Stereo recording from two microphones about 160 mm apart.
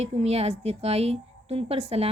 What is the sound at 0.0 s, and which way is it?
A woman's voice, 40° right (ahead or behind).